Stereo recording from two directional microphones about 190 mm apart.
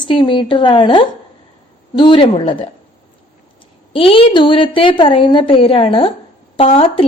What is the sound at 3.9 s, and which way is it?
A woman's voice, 30° left (ahead or behind).